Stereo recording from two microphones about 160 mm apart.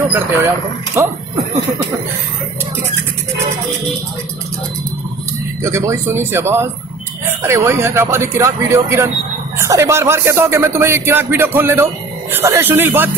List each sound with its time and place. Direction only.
1.0 s speech: 15° right (ahead or behind)
5.6 s speech: 20° right (ahead or behind)